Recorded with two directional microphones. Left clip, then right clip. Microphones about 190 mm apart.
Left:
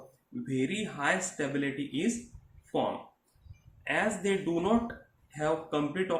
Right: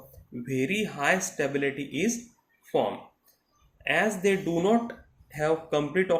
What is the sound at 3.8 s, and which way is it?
Speech, 35° right (ahead or behind).